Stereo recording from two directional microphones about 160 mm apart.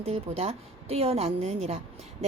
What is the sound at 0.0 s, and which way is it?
A woman's voice, 40° right (ahead or behind).